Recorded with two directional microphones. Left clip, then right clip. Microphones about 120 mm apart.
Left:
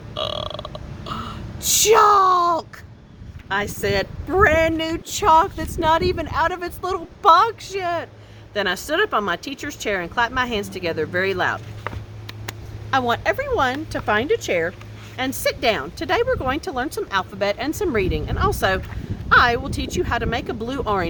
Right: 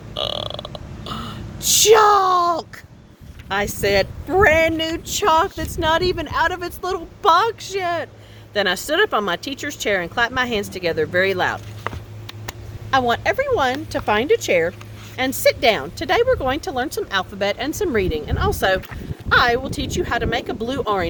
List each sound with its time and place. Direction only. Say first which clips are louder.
0.1 s burping: right 1 dB; 25° right (ahead or behind)
3.5 s speech: right 3 dB; 35° right (ahead or behind)
4.9 s speech: left 1 dB; 20° right (ahead or behind)
12.9 s speech: right 2 dB; 15° right (ahead or behind)
14.0 s speech: right 2 dB; 40° right (ahead or behind)
15.4 s speech: right 5 dB; 30° right (ahead or behind)